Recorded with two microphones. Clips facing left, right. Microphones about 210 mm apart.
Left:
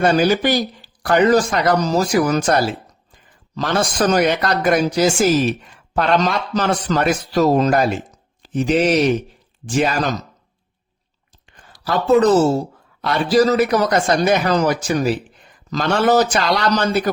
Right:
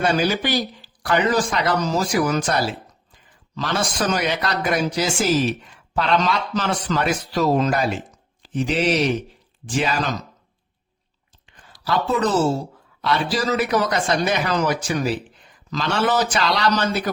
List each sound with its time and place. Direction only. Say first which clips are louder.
0.0 s a man's voice: left 5 dB; 45° left (ahead or behind)
11.7 s a man's voice: left 7 dB; 45° left (ahead or behind)